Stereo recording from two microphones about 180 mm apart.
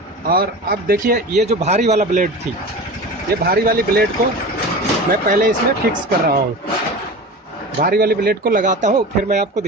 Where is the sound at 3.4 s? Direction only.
55° right (ahead or behind).